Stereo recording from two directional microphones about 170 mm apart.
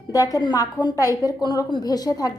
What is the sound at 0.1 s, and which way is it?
A woman's voice, 20° left (ahead or behind).